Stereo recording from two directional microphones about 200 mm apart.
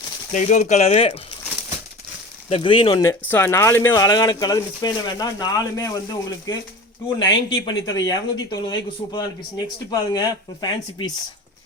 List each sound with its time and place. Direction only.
0.3 s speech: 35° left (ahead or behind)
2.5 s speech: 25° left (ahead or behind)